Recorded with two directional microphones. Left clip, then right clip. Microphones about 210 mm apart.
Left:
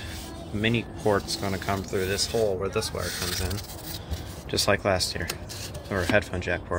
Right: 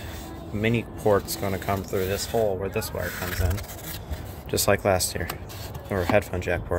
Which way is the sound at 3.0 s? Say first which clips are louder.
Even; 45° right (ahead or behind).